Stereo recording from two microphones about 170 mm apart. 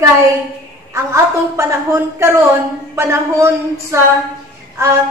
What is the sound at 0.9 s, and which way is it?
A woman's voice, 15° right (ahead or behind).